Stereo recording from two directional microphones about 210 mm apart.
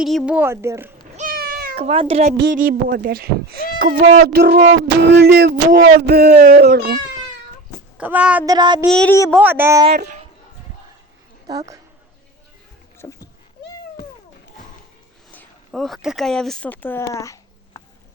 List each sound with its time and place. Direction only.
0.0 s speech: centre (ahead or behind)
1.1 s cat: 40° right (ahead or behind)
1.7 s speech: 30° right (ahead or behind)
2.4 s a sound: 40° right (ahead or behind)
7.9 s speech: 5° right (ahead or behind)
8.4 s speech: 20° right (ahead or behind)
8.9 s speech: 5° left (ahead or behind)
9.3 s speech: 10° right (ahead or behind)
9.9 s a sound: 50° right (ahead or behind)
13.0 s speech: 10° left (ahead or behind)
15.3 s speech: 5° left (ahead or behind)